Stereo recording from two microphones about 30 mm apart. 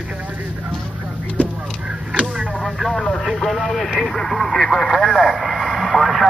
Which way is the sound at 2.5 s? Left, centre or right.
Centre.